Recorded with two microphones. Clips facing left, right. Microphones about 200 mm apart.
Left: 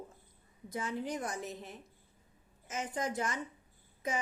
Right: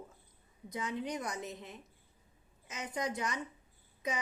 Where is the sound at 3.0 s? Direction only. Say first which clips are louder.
Even; 20° right (ahead or behind).